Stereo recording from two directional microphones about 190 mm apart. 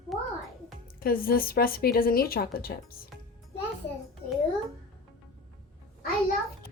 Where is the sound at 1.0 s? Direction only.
50° left (ahead or behind).